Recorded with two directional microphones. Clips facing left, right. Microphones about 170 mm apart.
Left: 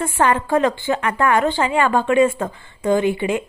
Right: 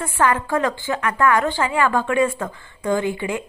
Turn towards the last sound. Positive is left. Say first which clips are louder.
# left 4 dB
turn(degrees=20)  # may be behind; listen again after turning